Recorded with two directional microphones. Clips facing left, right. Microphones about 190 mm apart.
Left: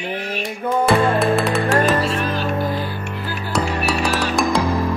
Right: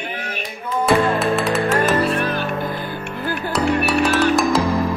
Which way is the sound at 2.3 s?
55° right (ahead or behind).